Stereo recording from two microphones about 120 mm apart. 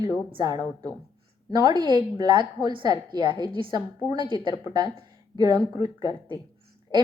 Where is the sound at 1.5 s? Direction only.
35° right (ahead or behind).